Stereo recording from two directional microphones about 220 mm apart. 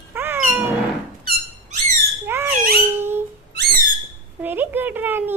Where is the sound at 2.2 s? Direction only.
10° right (ahead or behind).